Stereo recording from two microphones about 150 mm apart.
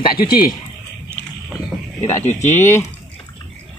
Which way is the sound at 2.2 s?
50° left (ahead or behind).